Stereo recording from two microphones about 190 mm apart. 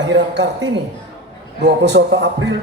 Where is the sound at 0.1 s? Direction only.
70° right (ahead or behind).